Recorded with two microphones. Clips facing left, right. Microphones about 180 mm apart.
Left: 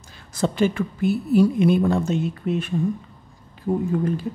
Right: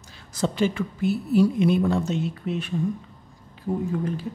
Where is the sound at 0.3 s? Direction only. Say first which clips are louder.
Left 3 dB; 55° left (ahead or behind).